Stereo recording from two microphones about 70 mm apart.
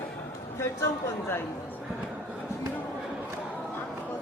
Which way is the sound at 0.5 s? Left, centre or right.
Left.